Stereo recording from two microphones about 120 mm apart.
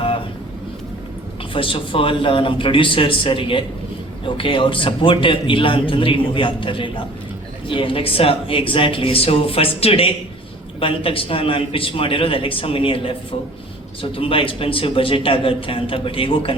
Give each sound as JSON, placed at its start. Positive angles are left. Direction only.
{"t": 1.5, "sound": "a man's voice", "side_deg": 45}